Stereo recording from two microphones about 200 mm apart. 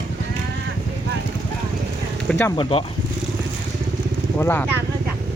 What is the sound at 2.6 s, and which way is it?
Speech, 30° left (ahead or behind).